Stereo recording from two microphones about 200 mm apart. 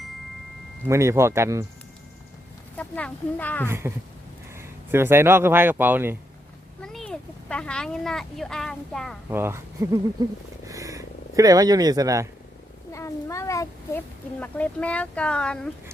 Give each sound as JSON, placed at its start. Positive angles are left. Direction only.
{"t": 0.9, "sound": "speech", "side_deg": -15}
{"t": 2.7, "sound": "speech", "side_deg": 5}
{"t": 3.7, "sound": "speech", "side_deg": -10}
{"t": 6.8, "sound": "a child's voice", "side_deg": 5}
{"t": 9.3, "sound": "speech", "side_deg": -10}
{"t": 12.9, "sound": "a child's voice", "side_deg": 15}